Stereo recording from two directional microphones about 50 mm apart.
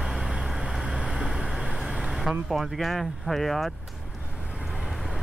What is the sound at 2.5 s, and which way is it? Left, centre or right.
Speech, centre.